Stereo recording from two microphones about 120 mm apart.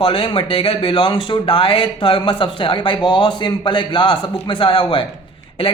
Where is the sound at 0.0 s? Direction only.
45° left (ahead or behind).